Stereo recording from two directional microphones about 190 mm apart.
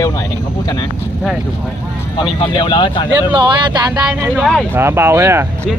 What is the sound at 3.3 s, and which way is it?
Speech, 25° right (ahead or behind).